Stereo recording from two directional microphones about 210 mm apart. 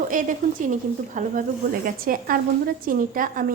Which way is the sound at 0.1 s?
35° right (ahead or behind).